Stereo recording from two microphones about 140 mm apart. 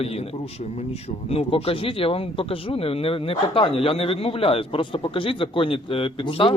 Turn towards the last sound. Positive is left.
turn(degrees=40)  # may be behind; listen again after turning